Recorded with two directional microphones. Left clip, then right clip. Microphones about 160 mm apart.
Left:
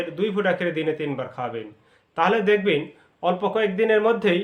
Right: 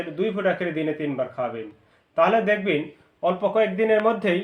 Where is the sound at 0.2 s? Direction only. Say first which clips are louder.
Even; 25° left (ahead or behind).